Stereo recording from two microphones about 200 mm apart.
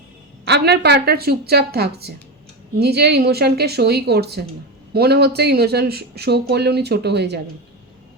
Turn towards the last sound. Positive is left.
turn(degrees=-55)  # may be behind; listen again after turning